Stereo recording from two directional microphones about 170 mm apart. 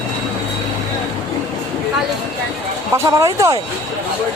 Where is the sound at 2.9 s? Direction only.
20° right (ahead or behind).